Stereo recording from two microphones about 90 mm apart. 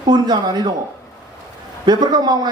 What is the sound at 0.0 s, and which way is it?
Speech, 55° right (ahead or behind).